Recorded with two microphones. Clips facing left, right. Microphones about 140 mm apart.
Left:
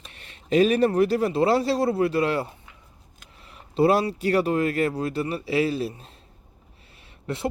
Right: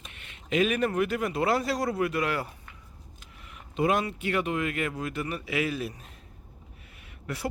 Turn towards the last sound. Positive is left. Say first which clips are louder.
# left 5 dB
turn(degrees=25)  # may be behind; listen again after turning